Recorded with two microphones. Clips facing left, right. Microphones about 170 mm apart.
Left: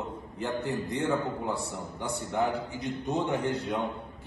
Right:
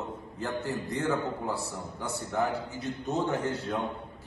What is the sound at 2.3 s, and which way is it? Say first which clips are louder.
A man's voice: left 1 dB; 20° left (ahead or behind).